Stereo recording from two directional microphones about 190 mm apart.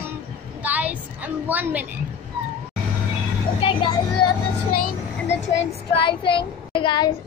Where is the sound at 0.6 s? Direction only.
10° right (ahead or behind).